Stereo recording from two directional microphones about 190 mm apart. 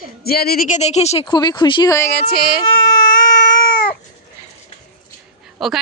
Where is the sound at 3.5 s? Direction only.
50° left (ahead or behind).